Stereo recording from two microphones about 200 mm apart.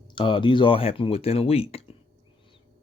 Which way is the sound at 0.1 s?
25° left (ahead or behind).